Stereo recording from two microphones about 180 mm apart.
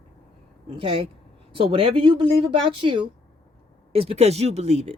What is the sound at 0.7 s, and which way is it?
Speech, 30° right (ahead or behind).